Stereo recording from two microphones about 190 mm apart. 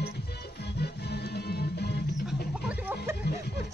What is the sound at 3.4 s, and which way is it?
Music, 60° left (ahead or behind).